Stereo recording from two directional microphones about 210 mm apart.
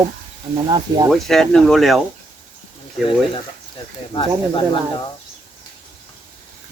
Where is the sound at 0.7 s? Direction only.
20° right (ahead or behind).